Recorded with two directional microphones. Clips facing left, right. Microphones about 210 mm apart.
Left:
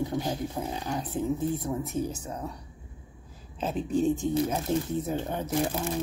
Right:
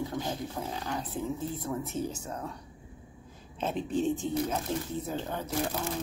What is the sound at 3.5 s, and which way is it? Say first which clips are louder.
Speech: left 3 dB; 5° left (ahead or behind).